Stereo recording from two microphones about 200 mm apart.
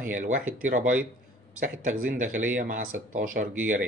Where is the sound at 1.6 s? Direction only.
40° right (ahead or behind).